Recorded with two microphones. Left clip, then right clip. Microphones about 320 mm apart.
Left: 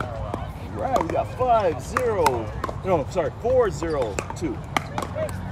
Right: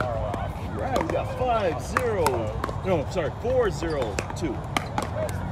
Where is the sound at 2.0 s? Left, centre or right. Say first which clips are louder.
Left 2 dB; centre.